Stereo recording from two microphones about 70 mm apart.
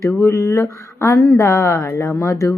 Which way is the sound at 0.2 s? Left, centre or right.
Left.